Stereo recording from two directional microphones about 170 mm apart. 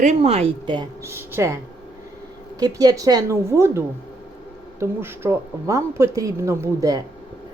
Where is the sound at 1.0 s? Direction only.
15° right (ahead or behind).